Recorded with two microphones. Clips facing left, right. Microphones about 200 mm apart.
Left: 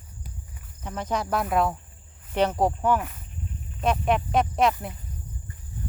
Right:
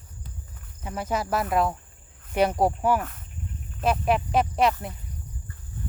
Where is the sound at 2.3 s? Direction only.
10° right (ahead or behind).